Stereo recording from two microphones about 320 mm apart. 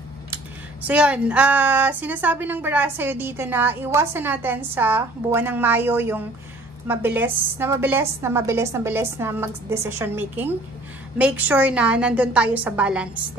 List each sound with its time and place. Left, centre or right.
0.8 s a woman's voice: centre